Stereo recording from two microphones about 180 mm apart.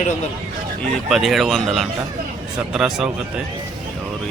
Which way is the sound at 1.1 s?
Centre (ahead or behind).